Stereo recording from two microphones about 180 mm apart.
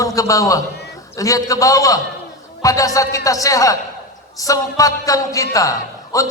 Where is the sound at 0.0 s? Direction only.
20° left (ahead or behind).